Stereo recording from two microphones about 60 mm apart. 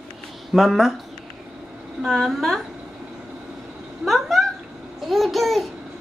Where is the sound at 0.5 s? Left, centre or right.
Centre.